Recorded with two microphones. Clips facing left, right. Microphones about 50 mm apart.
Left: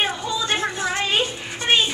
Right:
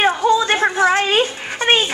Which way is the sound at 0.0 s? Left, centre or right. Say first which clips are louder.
Right 9 dB; right.